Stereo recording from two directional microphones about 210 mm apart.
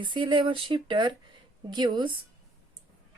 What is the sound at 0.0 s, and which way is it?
A woman's voice, 25° right (ahead or behind).